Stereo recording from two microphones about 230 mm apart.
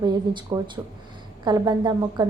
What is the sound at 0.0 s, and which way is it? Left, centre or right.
A woman's voice, centre.